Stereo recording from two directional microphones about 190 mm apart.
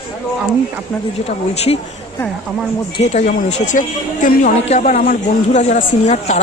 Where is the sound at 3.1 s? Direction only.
40° left (ahead or behind).